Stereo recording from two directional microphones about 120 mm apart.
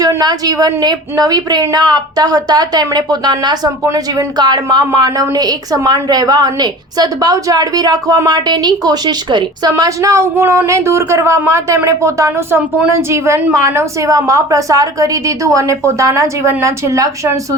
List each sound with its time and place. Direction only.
0.0 s a woman's voice: 35° right (ahead or behind)